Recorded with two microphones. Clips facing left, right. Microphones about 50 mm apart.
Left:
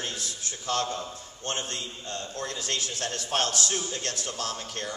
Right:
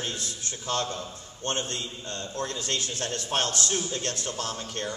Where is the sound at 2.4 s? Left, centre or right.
Right.